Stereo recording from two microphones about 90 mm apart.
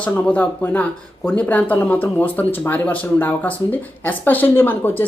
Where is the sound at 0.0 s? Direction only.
15° left (ahead or behind).